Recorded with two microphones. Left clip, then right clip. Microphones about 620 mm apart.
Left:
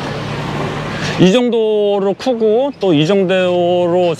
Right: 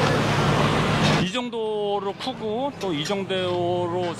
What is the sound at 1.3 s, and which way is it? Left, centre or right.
Speech, left.